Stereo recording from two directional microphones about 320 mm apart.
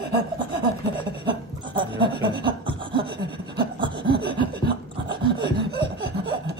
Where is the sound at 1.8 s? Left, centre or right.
Centre.